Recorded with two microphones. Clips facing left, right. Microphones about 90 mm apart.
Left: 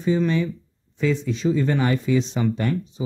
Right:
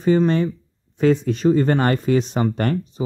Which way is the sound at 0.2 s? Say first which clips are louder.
Right 3 dB; 45° right (ahead or behind).